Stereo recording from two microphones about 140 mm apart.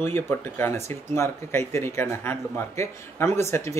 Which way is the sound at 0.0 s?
15° left (ahead or behind).